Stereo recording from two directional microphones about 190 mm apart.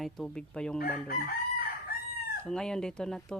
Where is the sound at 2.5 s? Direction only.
5° left (ahead or behind).